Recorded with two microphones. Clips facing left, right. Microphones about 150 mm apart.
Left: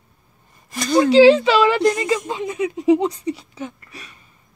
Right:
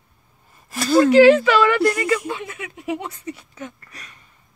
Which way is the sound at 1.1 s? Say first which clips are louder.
Left 2 dB; 30° left (ahead or behind).